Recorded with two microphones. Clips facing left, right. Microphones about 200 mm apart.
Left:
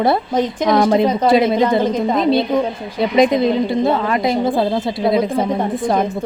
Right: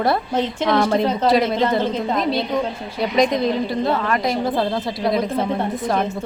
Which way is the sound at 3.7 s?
20° left (ahead or behind).